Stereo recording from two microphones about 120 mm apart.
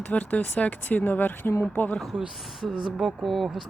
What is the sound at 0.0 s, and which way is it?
Speech, 10° left (ahead or behind).